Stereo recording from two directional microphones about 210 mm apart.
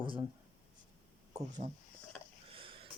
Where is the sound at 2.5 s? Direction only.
25° right (ahead or behind).